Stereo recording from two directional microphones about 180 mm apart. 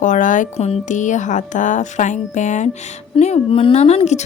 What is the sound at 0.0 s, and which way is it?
Speech, 45° left (ahead or behind).